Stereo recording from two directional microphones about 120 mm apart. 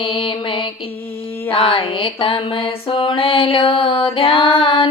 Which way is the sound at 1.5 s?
45° left (ahead or behind).